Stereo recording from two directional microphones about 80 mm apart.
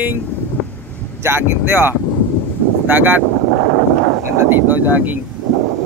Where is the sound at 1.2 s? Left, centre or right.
Right.